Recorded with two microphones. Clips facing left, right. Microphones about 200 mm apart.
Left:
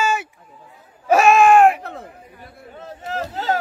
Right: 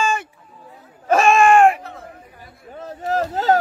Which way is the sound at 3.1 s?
40° right (ahead or behind).